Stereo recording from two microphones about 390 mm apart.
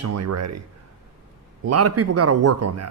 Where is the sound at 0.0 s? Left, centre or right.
Right.